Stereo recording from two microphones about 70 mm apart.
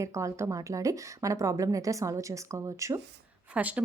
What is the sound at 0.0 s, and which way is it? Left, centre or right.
A woman's voice, right.